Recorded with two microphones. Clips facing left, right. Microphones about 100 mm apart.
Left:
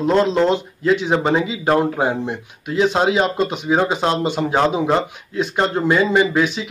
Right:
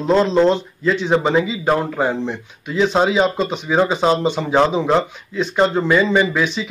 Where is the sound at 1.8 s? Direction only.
10° left (ahead or behind).